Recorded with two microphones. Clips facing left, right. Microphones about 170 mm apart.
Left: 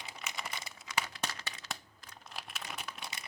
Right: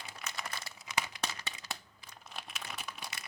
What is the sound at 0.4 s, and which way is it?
Crumpling, 10° left (ahead or behind).